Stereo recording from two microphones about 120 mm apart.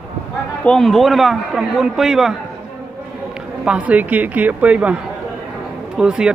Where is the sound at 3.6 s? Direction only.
10° right (ahead or behind).